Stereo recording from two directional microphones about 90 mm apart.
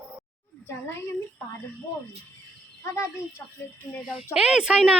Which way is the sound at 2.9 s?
30° left (ahead or behind).